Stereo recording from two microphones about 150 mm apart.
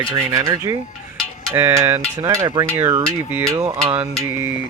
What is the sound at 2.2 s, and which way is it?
Speech, 20° right (ahead or behind).